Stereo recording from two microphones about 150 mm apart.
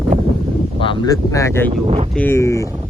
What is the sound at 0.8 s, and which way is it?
Speech, 30° left (ahead or behind).